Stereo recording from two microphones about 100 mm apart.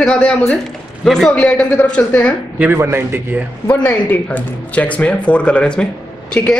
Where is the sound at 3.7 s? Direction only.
20° left (ahead or behind).